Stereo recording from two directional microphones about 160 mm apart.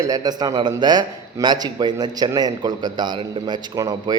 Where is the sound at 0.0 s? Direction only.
25° right (ahead or behind).